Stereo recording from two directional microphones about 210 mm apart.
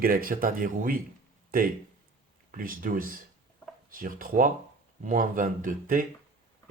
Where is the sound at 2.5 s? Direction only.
40° right (ahead or behind).